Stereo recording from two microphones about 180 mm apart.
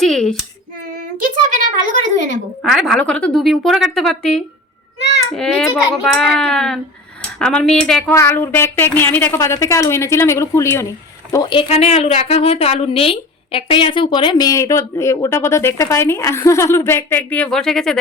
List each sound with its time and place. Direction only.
0.0 s a woman's voice: 5° left (ahead or behind)
1.2 s speech: 45° right (ahead or behind)
2.6 s a woman's voice: centre (ahead or behind)
8.1 s a woman's voice: 15° left (ahead or behind)